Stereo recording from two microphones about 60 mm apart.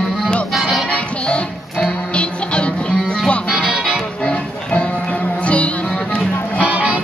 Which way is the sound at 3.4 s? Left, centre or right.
Centre.